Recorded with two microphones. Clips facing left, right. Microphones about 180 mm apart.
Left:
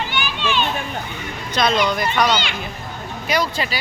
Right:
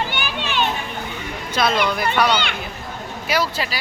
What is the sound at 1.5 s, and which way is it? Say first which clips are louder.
Speech: left 1 dB; 5° right (ahead or behind).